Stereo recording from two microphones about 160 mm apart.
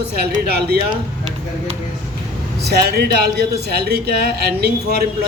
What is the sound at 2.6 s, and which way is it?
A man's voice, 80° right.